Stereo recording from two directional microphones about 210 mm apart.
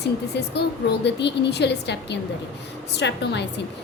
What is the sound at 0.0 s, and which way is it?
A woman's voice, 55° left (ahead or behind).